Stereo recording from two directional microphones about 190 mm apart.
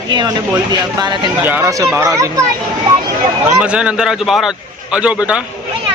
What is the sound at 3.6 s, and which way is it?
Speech, 5° right (ahead or behind).